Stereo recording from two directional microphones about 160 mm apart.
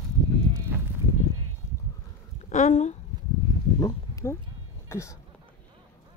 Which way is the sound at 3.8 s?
20° left (ahead or behind).